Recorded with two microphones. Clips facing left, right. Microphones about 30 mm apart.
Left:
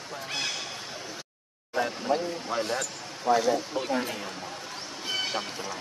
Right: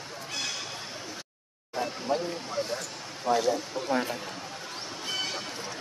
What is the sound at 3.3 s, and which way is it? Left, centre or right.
Speech, centre.